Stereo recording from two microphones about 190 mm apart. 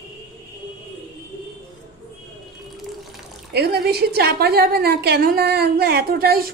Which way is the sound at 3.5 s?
60° right (ahead or behind).